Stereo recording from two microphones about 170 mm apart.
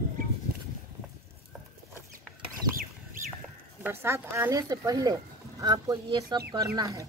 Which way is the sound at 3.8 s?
15° right (ahead or behind).